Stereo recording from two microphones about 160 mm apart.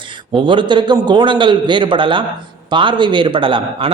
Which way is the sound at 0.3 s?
30° right (ahead or behind).